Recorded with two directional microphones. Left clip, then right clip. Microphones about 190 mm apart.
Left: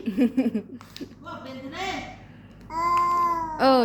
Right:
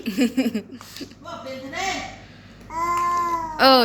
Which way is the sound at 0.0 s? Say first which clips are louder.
Right 2 dB; 15° left (ahead or behind).